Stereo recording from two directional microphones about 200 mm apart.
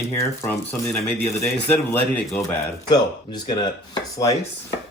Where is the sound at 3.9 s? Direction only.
15° left (ahead or behind).